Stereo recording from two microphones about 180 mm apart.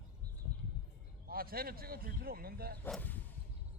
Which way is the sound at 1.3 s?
55° right (ahead or behind).